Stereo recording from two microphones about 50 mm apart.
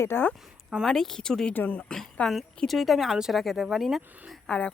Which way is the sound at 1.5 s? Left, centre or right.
Left.